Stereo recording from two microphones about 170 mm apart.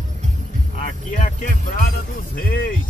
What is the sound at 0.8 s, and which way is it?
Speech, 50° left (ahead or behind).